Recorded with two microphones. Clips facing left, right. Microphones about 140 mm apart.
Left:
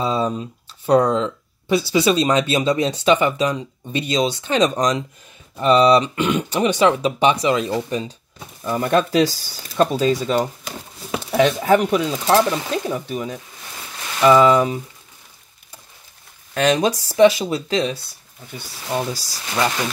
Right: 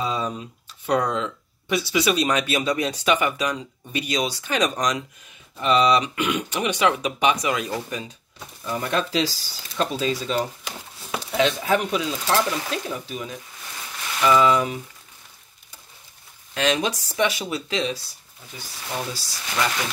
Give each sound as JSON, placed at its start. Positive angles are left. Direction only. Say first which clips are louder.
{"t": 0.0, "sound": "speech", "louder": "left 5 dB", "side_deg": 30}
{"t": 8.6, "sound": "speech", "louder": "left 7 dB", "side_deg": 50}
{"t": 16.5, "sound": "speech", "louder": "left 5 dB", "side_deg": 45}
{"t": 19.1, "sound": "speech", "louder": "left 4 dB", "side_deg": 40}